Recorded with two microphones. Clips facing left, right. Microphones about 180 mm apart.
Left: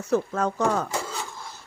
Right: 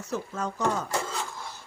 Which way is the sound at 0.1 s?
65° left (ahead or behind).